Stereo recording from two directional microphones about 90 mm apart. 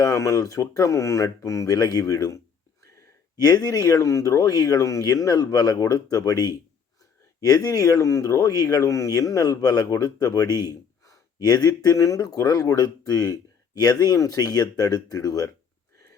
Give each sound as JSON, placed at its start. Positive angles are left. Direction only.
{"t": 0.0, "sound": "speech", "side_deg": 40}